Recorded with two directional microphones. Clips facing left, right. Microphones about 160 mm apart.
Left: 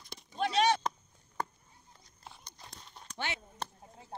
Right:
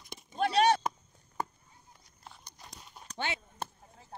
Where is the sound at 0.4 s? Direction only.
45° right (ahead or behind).